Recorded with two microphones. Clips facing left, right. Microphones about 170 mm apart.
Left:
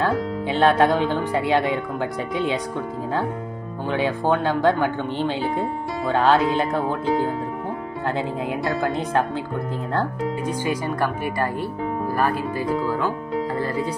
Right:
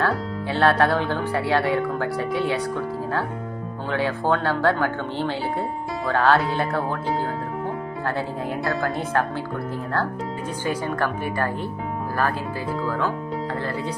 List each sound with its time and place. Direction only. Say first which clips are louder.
0.0 s speech: left 2 dB; 20° left (ahead or behind)
3.9 s speech: left 1 dB; 15° left (ahead or behind)
8.6 s speech: left 1 dB; 20° left (ahead or behind)
10.6 s speech: right 1 dB; 10° left (ahead or behind)
12.8 s speech: left 1 dB; 10° left (ahead or behind)